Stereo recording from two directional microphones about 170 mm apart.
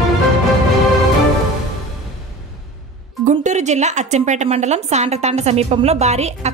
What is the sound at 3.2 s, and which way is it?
Speech, 45° right (ahead or behind).